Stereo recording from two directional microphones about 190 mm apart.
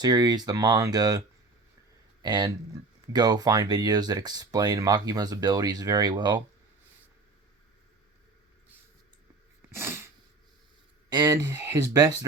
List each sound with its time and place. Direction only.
0.0 s speech: 20° right (ahead or behind)
2.2 s speech: 20° right (ahead or behind)
9.6 s sneeze: 15° right (ahead or behind)
11.1 s speech: 20° right (ahead or behind)